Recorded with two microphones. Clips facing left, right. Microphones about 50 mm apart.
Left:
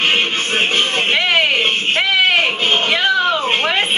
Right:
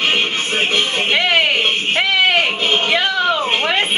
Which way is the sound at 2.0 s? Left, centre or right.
Centre.